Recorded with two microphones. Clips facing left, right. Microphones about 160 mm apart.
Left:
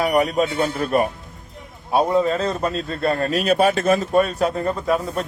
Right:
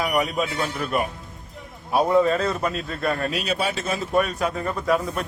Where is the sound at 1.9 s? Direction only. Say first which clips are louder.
Left 1 dB; 20° left (ahead or behind); by 4.1 s 50° left (ahead or behind).